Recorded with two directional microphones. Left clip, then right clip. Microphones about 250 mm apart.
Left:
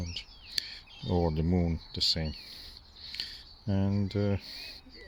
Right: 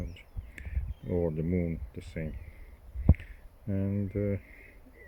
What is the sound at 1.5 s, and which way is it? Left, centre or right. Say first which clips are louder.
Speech: left 1 dB; left.